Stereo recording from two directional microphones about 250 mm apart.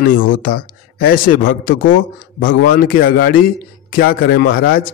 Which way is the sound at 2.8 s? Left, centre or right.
Left.